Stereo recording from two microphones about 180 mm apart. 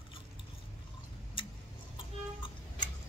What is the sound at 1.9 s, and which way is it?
Clock, 25° left (ahead or behind).